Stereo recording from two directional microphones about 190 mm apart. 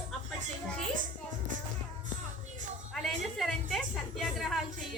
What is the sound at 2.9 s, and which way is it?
A woman's voice, centre (ahead or behind).